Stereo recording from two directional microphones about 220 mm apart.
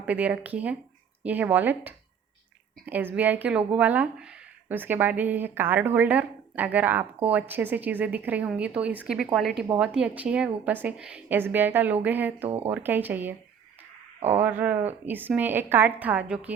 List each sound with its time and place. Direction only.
0.0 s speech: 5° right (ahead or behind)
14.2 s speech: 30° right (ahead or behind)
14.4 s speech: 5° right (ahead or behind)